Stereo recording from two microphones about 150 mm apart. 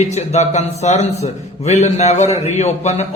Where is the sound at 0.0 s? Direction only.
50° left (ahead or behind).